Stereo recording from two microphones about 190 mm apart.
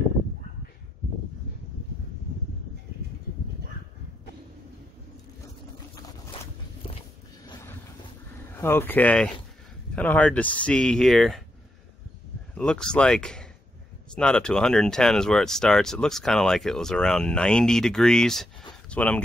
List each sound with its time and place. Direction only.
7.4 s vehicle: 20° left (ahead or behind)
8.5 s speech: 10° left (ahead or behind)
12.5 s speech: 5° left (ahead or behind)